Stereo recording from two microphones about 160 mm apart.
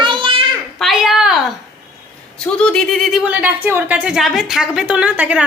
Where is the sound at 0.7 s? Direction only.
Centre (ahead or behind).